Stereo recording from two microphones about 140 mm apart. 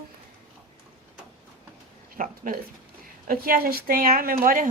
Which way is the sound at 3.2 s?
90° right.